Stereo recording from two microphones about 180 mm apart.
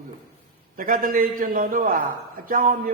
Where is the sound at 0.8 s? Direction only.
50° right (ahead or behind).